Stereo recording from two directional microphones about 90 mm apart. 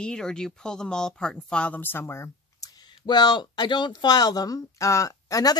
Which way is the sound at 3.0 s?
55° left (ahead or behind).